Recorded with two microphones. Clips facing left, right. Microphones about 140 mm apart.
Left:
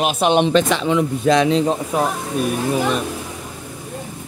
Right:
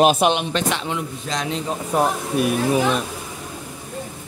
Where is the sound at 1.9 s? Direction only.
5° right (ahead or behind).